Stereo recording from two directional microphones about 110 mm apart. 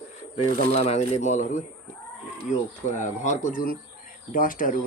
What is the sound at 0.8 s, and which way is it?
Speech, 90° left.